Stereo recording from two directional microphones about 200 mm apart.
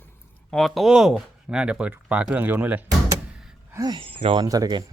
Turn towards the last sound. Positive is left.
turn(degrees=-20)  # may be behind; listen again after turning